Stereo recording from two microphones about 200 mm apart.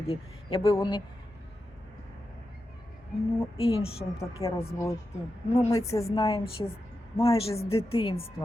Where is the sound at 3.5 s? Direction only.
30° left (ahead or behind).